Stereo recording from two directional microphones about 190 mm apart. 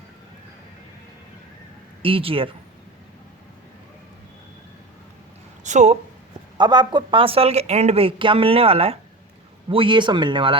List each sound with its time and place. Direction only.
2.0 s speech: 30° right (ahead or behind)
5.6 s speech: 35° right (ahead or behind)
6.6 s speech: 25° right (ahead or behind)